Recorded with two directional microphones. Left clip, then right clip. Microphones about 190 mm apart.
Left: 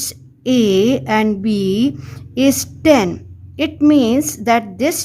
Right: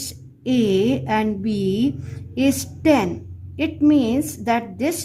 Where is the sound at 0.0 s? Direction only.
40° left (ahead or behind).